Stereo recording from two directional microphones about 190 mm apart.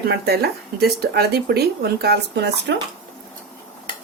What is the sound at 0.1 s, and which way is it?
Speech, 55° right (ahead or behind).